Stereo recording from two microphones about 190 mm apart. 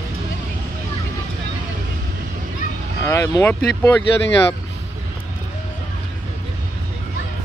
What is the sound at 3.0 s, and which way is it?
Speech, 15° left (ahead or behind).